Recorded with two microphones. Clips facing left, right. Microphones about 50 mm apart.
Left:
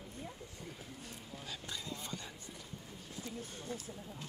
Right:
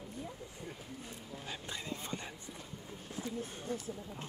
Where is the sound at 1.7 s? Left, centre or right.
Right.